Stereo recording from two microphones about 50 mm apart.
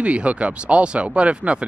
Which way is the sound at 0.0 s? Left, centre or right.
Right.